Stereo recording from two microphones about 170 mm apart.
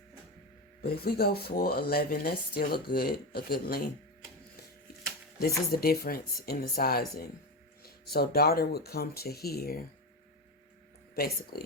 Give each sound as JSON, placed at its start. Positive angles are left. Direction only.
{"t": 0.8, "sound": "speech", "side_deg": 65}
{"t": 5.4, "sound": "speech", "side_deg": 65}
{"t": 11.1, "sound": "speech", "side_deg": 65}